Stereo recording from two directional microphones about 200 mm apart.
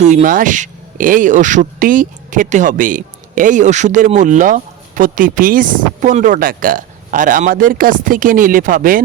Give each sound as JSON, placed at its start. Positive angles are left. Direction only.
{"t": 0.0, "sound": "speech", "side_deg": -35}